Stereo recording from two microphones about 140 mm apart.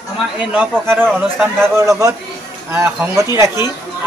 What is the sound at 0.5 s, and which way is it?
A man's voice, 10° right (ahead or behind).